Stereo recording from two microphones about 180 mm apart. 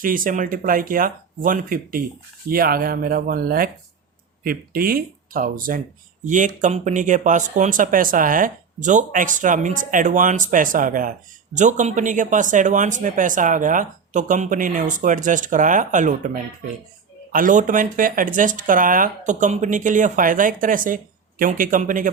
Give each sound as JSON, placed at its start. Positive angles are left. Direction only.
{"t": 0.0, "sound": "speech", "side_deg": -50}